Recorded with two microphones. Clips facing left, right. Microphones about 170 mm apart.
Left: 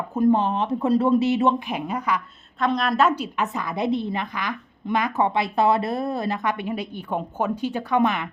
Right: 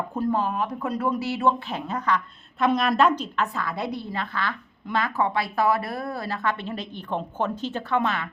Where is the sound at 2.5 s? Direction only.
5° right (ahead or behind); by 8.3 s 15° left (ahead or behind).